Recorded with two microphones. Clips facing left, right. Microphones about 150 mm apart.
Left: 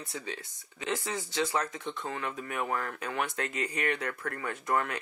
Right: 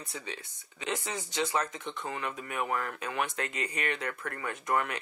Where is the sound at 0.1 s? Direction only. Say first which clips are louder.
Left 3 dB; 20° right (ahead or behind).